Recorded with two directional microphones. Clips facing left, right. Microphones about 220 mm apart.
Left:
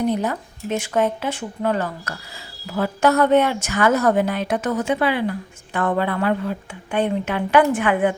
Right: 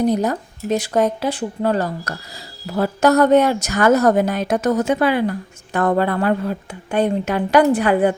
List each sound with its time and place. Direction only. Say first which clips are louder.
0.0 s a woman's voice: right 3 dB; 40° right (ahead or behind)